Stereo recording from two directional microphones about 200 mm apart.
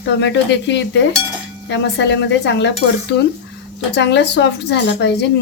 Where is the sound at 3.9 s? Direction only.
60° left (ahead or behind).